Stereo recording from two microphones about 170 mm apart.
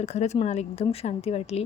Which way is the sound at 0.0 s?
40° left (ahead or behind).